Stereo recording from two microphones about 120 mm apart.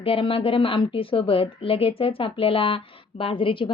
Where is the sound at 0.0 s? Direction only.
50° left (ahead or behind).